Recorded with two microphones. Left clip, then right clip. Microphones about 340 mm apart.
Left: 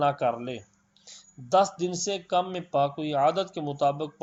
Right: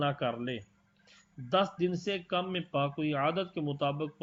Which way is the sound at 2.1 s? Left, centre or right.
Left.